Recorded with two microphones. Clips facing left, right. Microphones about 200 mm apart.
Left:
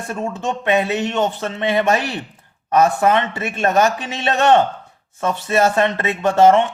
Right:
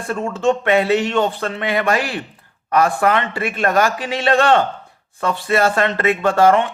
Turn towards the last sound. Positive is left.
turn(degrees=20)  # may be behind; listen again after turning